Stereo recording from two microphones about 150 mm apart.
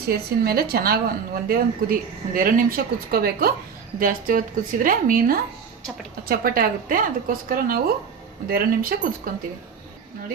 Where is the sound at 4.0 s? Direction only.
70° right (ahead or behind).